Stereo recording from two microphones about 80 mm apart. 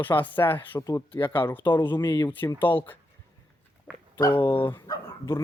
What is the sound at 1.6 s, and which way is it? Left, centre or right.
Speech, left.